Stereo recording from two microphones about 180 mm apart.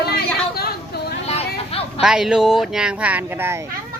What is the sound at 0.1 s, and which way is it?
Chatter, 60° left (ahead or behind).